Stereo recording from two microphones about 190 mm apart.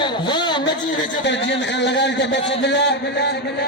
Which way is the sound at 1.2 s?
65° left (ahead or behind).